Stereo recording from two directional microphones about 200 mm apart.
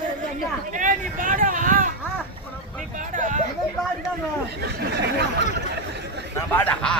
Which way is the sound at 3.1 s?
40° right (ahead or behind).